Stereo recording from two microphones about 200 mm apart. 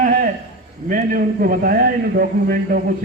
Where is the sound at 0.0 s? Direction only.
40° right (ahead or behind).